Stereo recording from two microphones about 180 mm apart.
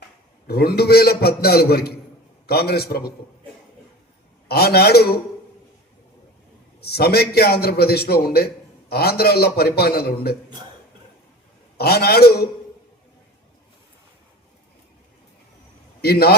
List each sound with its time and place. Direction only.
0.4 s a man's voice: 60° left (ahead or behind)
4.4 s a man's voice: 60° left (ahead or behind)
6.8 s a man's voice: 60° left (ahead or behind)
11.8 s a man's voice: 60° left (ahead or behind)
16.0 s a man's voice: 60° left (ahead or behind)